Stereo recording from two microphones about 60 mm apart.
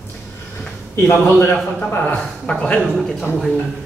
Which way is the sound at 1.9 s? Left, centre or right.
Left.